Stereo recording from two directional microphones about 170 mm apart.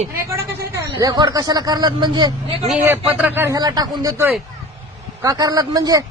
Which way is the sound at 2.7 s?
10° right (ahead or behind).